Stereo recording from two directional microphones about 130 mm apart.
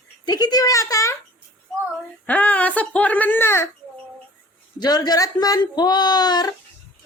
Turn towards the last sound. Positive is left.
turn(degrees=30)  # may be behind; listen again after turning